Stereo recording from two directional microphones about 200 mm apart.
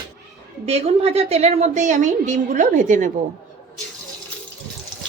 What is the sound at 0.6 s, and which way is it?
A woman's voice, 35° right (ahead or behind).